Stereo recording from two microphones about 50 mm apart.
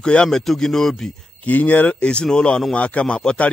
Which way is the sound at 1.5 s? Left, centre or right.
Left.